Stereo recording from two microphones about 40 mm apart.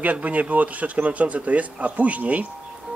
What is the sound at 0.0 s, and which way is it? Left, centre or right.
Speech, right.